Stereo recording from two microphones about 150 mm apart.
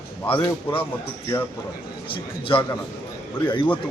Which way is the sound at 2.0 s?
35° left (ahead or behind).